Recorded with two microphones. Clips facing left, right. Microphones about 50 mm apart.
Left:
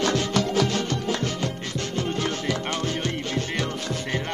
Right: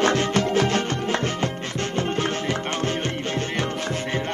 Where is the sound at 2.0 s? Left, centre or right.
Right.